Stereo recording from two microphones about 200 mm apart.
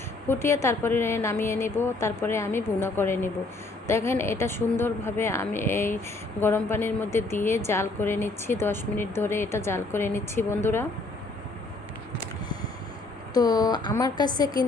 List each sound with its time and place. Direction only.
0.3 s a woman's voice: 15° left (ahead or behind)
13.3 s a woman's voice: 20° left (ahead or behind)